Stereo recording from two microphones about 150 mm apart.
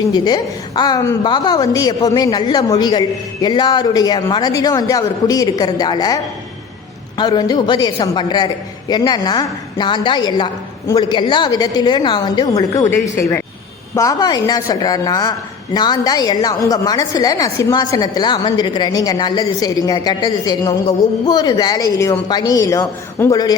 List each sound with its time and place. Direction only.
0.1 s a woman's voice: 25° left (ahead or behind)